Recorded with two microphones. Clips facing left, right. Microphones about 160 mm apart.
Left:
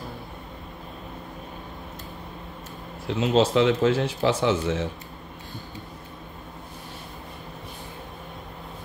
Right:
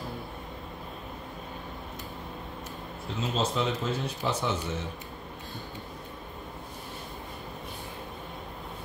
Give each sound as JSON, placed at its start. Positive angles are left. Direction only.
{"t": 3.2, "sound": "speech", "side_deg": 90}